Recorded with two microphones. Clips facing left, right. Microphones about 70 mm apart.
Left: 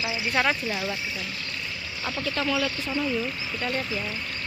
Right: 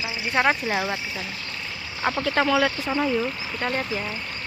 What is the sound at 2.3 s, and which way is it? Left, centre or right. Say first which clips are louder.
Speech: right 5 dB; right.